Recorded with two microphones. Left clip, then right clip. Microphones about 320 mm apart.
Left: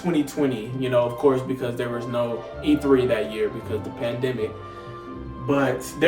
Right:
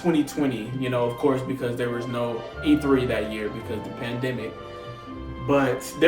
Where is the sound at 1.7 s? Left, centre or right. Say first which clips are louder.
Left 1 dB; centre.